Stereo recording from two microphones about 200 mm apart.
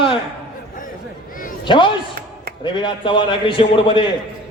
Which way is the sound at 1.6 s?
25° left (ahead or behind).